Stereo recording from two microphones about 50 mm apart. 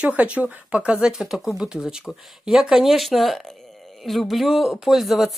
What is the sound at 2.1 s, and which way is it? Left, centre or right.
Speech, centre.